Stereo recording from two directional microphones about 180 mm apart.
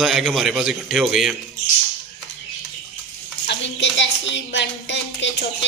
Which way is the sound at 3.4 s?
80° left.